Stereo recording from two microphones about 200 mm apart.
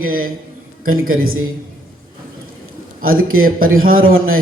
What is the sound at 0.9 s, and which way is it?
Speech, 90° right.